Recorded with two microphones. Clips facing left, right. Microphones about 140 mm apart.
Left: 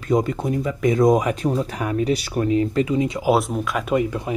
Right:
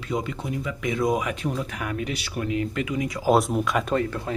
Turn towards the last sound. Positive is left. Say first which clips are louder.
# left 4 dB
turn(degrees=15)  # may be behind; listen again after turning